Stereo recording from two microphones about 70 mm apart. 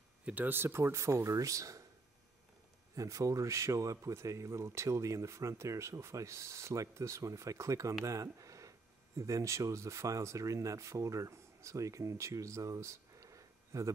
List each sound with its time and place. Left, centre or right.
0.2 s speech: right
3.0 s speech: right